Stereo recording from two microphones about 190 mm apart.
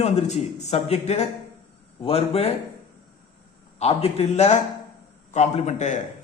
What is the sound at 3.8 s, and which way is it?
Speech, 35° left (ahead or behind).